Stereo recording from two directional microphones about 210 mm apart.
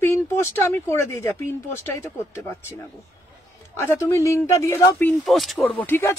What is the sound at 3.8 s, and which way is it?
Speech, 10° left (ahead or behind).